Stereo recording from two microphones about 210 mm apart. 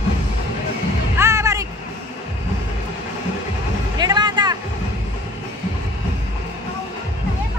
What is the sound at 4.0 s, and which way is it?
Music, 20° right (ahead or behind).